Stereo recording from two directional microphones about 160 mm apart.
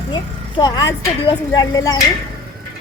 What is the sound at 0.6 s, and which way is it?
Speech, 25° left (ahead or behind).